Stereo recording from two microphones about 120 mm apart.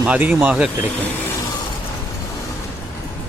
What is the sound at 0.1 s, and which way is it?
Speech, 15° right (ahead or behind).